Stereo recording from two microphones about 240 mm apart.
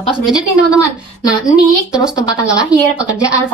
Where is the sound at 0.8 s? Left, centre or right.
Centre.